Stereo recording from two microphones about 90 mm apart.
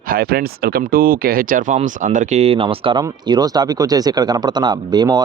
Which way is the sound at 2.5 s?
90° right.